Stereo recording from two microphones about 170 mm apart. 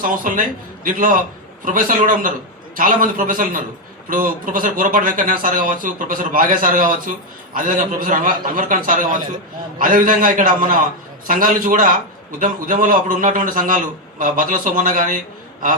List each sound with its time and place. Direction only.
0.0 s a man's voice: 55° right (ahead or behind)